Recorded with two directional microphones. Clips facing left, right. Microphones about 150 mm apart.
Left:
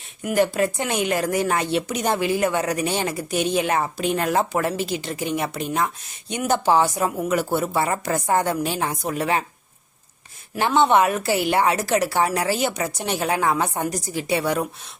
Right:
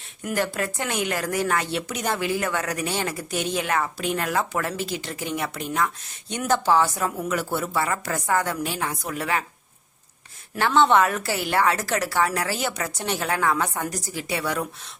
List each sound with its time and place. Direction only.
0.2 s a woman's voice: 15° left (ahead or behind)
10.5 s a woman's voice: 15° left (ahead or behind)